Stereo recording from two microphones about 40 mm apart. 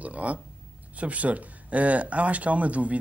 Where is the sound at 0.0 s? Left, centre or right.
Right.